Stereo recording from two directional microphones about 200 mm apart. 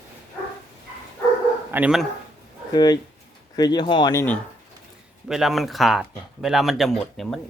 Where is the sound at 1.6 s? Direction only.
10° right (ahead or behind).